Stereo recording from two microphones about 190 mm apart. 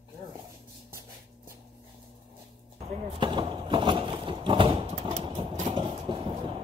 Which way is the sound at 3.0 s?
25° right (ahead or behind).